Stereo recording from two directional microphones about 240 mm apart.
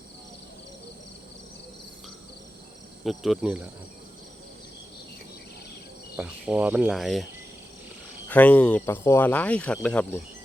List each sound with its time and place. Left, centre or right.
3.0 s speech: centre
6.1 s speech: centre
8.3 s speech: centre